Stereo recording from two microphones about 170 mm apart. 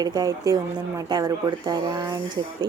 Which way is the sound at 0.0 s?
25° right (ahead or behind).